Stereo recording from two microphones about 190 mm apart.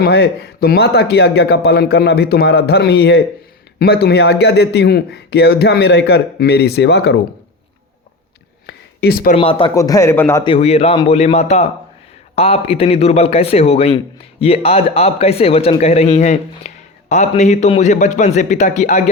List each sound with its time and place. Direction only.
0.0 s speech: 55° left (ahead or behind)
8.6 s a sound: 55° left (ahead or behind)
9.3 s speech: 30° left (ahead or behind)
9.7 s a man's voice: 15° left (ahead or behind)
10.4 s a man's voice: 30° left (ahead or behind)